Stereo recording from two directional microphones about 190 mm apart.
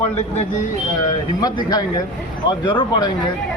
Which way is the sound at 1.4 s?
20° left (ahead or behind).